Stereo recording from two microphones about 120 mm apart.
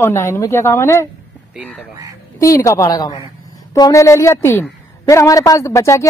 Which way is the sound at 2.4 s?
25° left (ahead or behind).